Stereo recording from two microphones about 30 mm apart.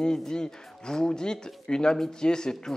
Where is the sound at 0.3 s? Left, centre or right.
Left.